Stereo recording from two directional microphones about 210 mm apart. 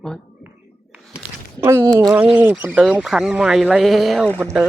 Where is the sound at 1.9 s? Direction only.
10° right (ahead or behind).